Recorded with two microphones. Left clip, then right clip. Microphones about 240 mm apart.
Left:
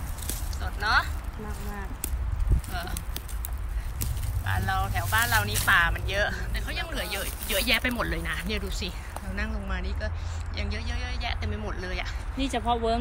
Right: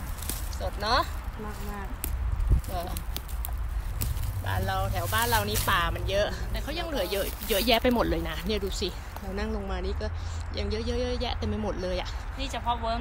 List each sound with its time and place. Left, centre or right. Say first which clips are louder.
0.3 s a sound: right 3 dB; centre
4.0 s vehicle: left 1 dB; centre
5.1 s speech: left 2 dB; centre
12.4 s speech: left 5 dB; right
12.6 s speech: left 2 dB; right